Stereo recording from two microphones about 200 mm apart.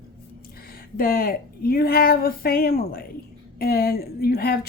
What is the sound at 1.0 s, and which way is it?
Speech, 50° left (ahead or behind).